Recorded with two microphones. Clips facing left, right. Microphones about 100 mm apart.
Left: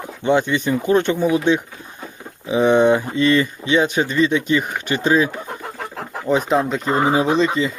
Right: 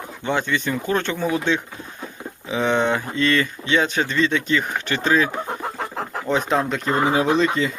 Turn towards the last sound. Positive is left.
turn(degrees=0)  # may be behind; listen again after turning